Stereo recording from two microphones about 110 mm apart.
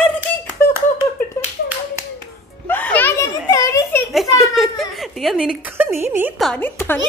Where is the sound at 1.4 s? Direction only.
25° left (ahead or behind).